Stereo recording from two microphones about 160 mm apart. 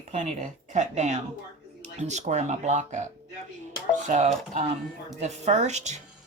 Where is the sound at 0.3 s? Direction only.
50° right (ahead or behind).